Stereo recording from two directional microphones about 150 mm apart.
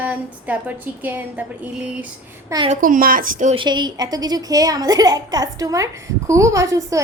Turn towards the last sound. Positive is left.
turn(degrees=-20)  # may be behind; listen again after turning